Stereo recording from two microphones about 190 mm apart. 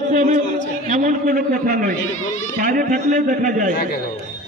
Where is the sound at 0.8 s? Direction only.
45° right (ahead or behind).